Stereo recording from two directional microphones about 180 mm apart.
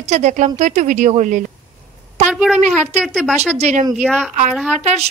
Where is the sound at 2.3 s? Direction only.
Centre (ahead or behind).